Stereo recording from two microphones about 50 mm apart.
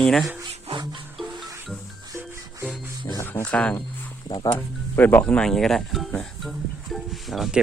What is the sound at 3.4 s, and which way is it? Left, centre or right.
Speech, left.